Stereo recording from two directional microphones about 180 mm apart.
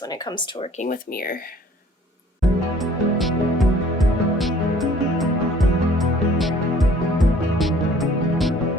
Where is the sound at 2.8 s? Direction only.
Centre (ahead or behind).